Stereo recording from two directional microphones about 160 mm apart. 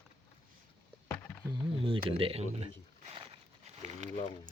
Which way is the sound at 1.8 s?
35° right (ahead or behind).